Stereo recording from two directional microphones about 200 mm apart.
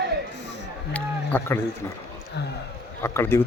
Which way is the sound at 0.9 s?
10° left (ahead or behind).